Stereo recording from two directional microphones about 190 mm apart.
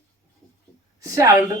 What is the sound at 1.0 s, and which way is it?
Speech, 15° right (ahead or behind).